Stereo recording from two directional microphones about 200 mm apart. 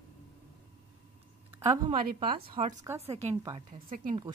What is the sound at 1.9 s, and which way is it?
Speech, 35° right (ahead or behind).